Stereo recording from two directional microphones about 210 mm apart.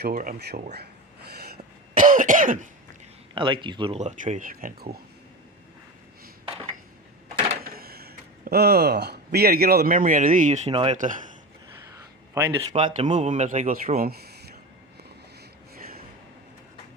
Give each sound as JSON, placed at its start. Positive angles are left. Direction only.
{"t": 0.0, "sound": "speech", "side_deg": -45}
{"t": 1.4, "sound": "cough", "side_deg": -45}
{"t": 3.3, "sound": "speech", "side_deg": -25}
{"t": 7.6, "sound": "speech", "side_deg": -45}
{"t": 10.9, "sound": "speech", "side_deg": -40}
{"t": 12.3, "sound": "speech", "side_deg": -20}
{"t": 13.1, "sound": "speech", "side_deg": -35}